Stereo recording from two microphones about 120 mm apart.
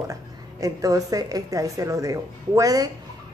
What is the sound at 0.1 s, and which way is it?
A woman's voice, 30° right (ahead or behind).